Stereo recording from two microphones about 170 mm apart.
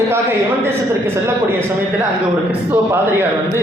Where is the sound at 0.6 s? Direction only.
15° right (ahead or behind).